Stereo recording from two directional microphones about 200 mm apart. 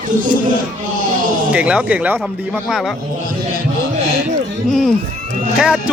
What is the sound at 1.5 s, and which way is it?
Speech, 5° right (ahead or behind).